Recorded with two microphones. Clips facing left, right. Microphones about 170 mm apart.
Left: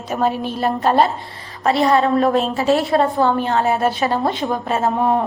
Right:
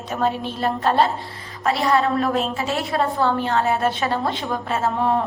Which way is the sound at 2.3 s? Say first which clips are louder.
Left 6 dB; 35° left (ahead or behind).